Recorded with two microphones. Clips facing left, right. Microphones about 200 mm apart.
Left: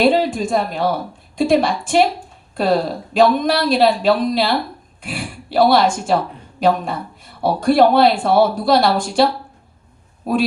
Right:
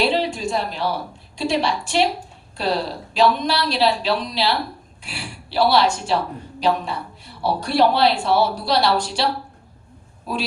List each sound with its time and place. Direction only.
0.0 s a woman's voice: 50° left (ahead or behind)